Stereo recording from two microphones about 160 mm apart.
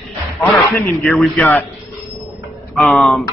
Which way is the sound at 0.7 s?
Centre (ahead or behind).